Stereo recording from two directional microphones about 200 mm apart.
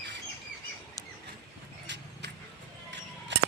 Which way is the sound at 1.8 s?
60° right (ahead or behind).